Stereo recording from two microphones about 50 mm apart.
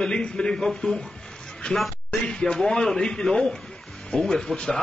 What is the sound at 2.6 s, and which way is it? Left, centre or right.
A man's voice, centre.